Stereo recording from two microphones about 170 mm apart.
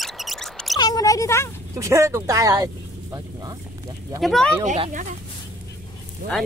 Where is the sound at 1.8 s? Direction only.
15° right (ahead or behind).